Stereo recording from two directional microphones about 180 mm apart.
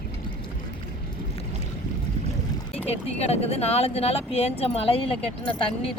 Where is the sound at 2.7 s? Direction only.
35° left (ahead or behind).